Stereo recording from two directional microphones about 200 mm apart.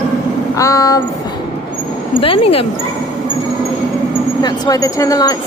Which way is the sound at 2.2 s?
30° left (ahead or behind).